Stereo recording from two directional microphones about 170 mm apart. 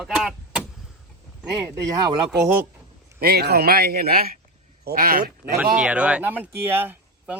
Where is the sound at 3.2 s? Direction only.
70° right (ahead or behind).